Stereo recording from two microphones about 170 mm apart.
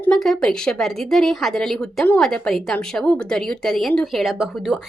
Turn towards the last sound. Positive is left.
turn(degrees=0)  # may be behind; listen again after turning